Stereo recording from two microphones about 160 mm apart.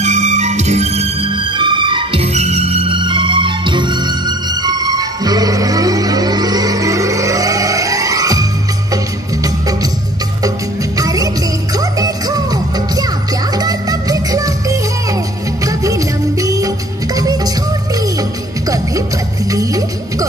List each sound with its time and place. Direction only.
0.0 s music: 45° right (ahead or behind); by 9.8 s 20° right (ahead or behind)
11.0 s music: 20° right (ahead or behind)
19.5 s music: 20° right (ahead or behind)